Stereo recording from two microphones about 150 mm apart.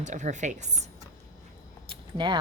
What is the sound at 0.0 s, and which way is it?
Speech, 55° right (ahead or behind).